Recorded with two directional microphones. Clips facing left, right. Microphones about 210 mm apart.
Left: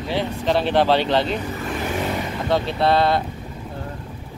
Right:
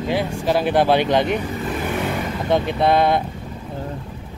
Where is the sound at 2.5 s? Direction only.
15° right (ahead or behind).